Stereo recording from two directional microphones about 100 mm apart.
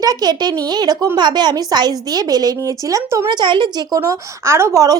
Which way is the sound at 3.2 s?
50° right (ahead or behind).